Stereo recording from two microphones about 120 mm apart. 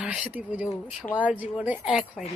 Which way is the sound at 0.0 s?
5° right (ahead or behind).